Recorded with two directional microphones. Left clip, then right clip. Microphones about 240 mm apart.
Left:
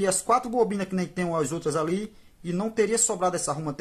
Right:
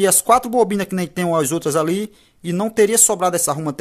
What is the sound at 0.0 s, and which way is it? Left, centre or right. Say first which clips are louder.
Speech: right 9 dB; right.